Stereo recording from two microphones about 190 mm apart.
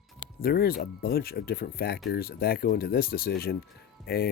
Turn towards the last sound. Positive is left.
turn(degrees=55)  # may be behind; listen again after turning